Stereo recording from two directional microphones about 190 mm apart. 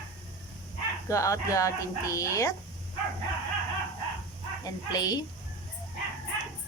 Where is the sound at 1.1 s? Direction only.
15° left (ahead or behind).